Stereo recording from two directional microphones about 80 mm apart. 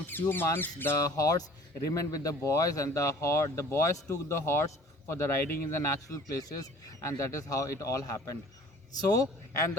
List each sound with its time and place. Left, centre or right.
0.1 s speech: left
0.9 s speech: left
6.1 s speech: left